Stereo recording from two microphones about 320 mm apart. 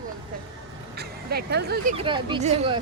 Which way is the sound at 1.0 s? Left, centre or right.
Right.